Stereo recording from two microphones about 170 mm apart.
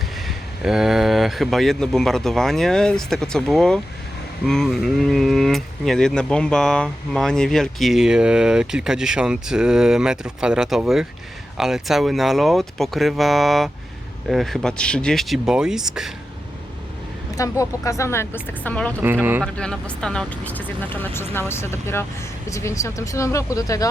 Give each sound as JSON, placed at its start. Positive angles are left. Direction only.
{"t": 0.3, "sound": "speech", "side_deg": -5}
{"t": 17.3, "sound": "speech", "side_deg": 20}
{"t": 19.2, "sound": "speech", "side_deg": -10}
{"t": 19.5, "sound": "speech", "side_deg": 5}